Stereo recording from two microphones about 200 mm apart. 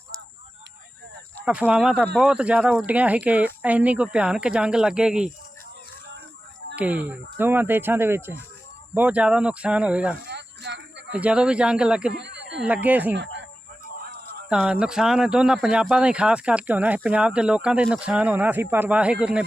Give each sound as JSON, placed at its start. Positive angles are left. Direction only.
{"t": 1.5, "sound": "speech", "side_deg": -5}
{"t": 6.7, "sound": "speech", "side_deg": -5}
{"t": 10.2, "sound": "a sound", "side_deg": -60}
{"t": 11.1, "sound": "speech", "side_deg": -5}
{"t": 12.1, "sound": "a sound", "side_deg": -60}
{"t": 12.6, "sound": "speech", "side_deg": -10}
{"t": 13.1, "sound": "speech", "side_deg": -65}
{"t": 14.5, "sound": "speech", "side_deg": -5}